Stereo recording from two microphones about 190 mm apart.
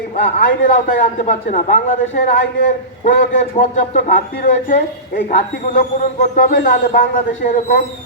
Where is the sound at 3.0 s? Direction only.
40° left (ahead or behind).